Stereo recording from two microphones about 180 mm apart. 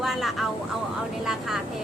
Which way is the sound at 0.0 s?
Centre (ahead or behind).